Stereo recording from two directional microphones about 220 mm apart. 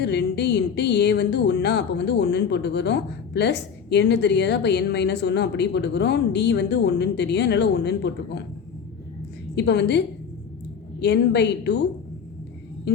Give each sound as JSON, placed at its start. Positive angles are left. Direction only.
{"t": 0.0, "sound": "speech", "side_deg": 50}
{"t": 9.6, "sound": "speech", "side_deg": 50}
{"t": 11.0, "sound": "speech", "side_deg": 50}